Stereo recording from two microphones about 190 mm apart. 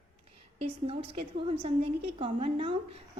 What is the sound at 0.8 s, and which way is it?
A woman's voice, 30° right (ahead or behind).